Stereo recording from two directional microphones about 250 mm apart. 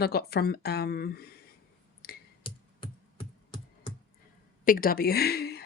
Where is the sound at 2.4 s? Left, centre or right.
Left.